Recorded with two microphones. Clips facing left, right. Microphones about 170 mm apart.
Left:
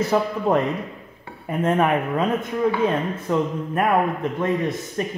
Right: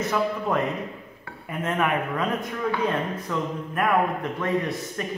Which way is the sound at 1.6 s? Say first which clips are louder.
Left 5 dB; 30° left (ahead or behind).